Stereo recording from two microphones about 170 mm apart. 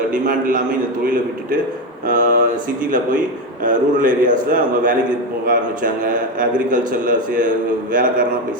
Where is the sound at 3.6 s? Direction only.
50° right (ahead or behind).